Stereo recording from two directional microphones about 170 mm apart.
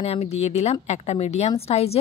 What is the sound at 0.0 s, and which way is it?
A woman's voice, 40° left (ahead or behind).